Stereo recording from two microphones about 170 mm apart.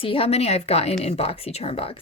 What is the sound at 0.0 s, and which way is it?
Speech, 35° left (ahead or behind).